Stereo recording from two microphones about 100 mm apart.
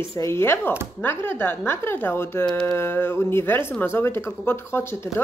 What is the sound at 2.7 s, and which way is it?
Speech, 25° left (ahead or behind).